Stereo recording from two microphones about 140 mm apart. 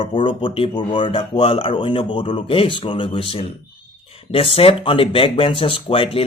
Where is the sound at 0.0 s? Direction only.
35° left (ahead or behind).